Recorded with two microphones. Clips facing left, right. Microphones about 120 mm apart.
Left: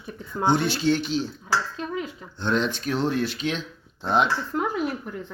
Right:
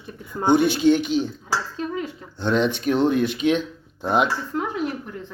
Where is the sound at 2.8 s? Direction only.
50° right (ahead or behind).